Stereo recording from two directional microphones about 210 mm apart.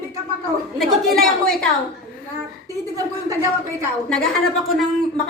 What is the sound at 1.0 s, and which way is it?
Speech, centre (ahead or behind).